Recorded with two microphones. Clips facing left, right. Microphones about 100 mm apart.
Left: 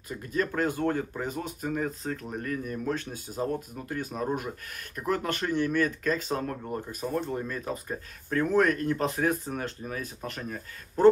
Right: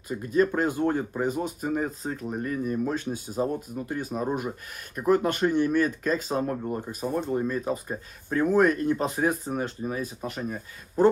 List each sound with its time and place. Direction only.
0.1 s speech: 20° right (ahead or behind)
1.2 s speech: 10° right (ahead or behind)
2.9 s speech: 5° right (ahead or behind)
6.6 s speech: 5° right (ahead or behind)